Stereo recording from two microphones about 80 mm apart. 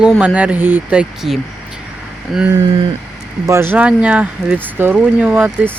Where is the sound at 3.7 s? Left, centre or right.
Centre.